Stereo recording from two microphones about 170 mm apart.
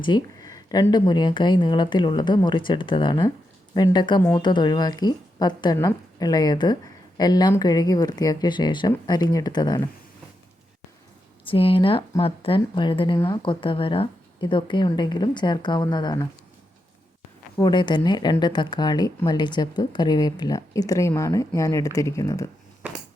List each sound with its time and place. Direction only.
0.0 s speech: 25° left (ahead or behind)
11.4 s speech: 30° left (ahead or behind)
17.6 s speech: 25° left (ahead or behind)